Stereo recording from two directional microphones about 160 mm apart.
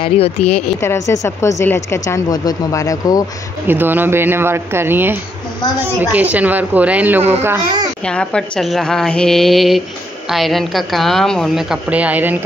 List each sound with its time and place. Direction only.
0.0 s speech: 40° left (ahead or behind)
0.7 s a woman's voice: 15° left (ahead or behind)
3.6 s speech: 15° right (ahead or behind)
8.0 s a woman's voice: 5° left (ahead or behind); by 12.4 s 10° right (ahead or behind)